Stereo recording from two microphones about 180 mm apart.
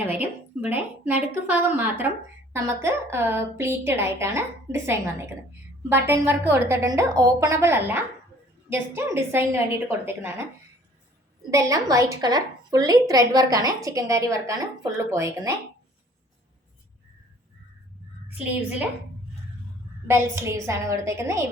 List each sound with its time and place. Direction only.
0.0 s a woman's voice: 10° right (ahead or behind)
11.5 s a woman's voice: 20° right (ahead or behind)
20.1 s a woman's voice: 15° right (ahead or behind)